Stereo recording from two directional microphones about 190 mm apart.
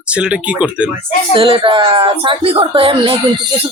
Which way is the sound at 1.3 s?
25° right (ahead or behind).